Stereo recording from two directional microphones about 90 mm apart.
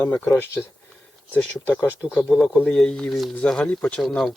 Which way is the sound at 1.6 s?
25° left (ahead or behind).